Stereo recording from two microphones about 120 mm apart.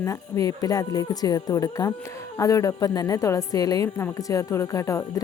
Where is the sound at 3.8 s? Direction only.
20° left (ahead or behind).